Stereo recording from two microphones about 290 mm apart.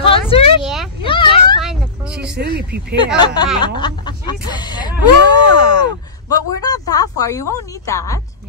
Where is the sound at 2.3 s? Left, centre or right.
Right.